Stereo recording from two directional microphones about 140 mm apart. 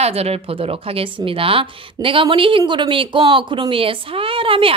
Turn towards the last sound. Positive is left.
turn(degrees=-40)  # may be behind; listen again after turning